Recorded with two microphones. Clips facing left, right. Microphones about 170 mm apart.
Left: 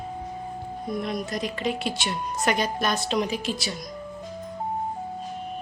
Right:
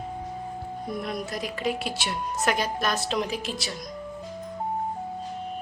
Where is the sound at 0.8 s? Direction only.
5° right (ahead or behind).